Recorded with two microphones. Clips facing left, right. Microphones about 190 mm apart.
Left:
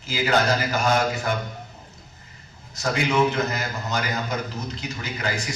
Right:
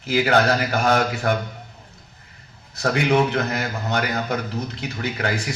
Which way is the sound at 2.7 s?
60° right (ahead or behind).